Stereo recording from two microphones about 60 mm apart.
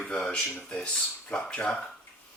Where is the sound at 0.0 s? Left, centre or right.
Centre.